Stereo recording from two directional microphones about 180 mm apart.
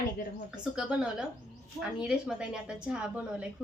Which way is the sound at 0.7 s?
5° right (ahead or behind).